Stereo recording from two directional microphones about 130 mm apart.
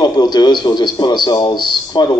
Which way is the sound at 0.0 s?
35° left (ahead or behind).